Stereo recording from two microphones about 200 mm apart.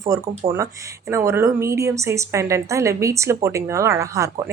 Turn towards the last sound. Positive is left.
turn(degrees=-15)  # may be behind; listen again after turning